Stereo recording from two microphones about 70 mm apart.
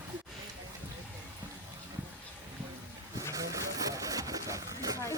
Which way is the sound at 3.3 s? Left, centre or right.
Right.